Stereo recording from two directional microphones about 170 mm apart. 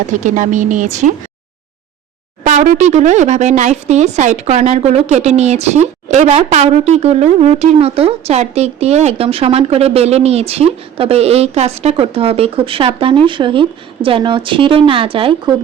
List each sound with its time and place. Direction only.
0.1 s a woman's voice: 50° right (ahead or behind)
2.4 s speech: 45° right (ahead or behind)